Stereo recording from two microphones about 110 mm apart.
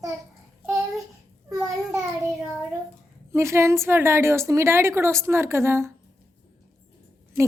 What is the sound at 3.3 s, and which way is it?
A woman's voice, 25° right (ahead or behind).